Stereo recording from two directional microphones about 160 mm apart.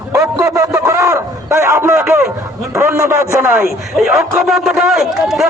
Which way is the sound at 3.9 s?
Centre (ahead or behind).